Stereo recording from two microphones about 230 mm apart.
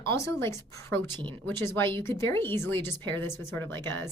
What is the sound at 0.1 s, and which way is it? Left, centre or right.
A woman's voice, centre.